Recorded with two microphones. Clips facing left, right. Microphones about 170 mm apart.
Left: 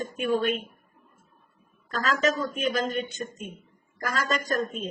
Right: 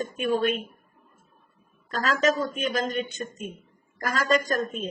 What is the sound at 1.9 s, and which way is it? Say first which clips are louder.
Speech: right 2 dB; 40° right (ahead or behind).